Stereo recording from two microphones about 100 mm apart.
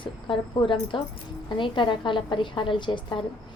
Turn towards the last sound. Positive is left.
turn(degrees=50)  # may be behind; listen again after turning